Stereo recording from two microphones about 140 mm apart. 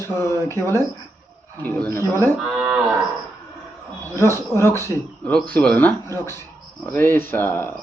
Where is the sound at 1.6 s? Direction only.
15° left (ahead or behind).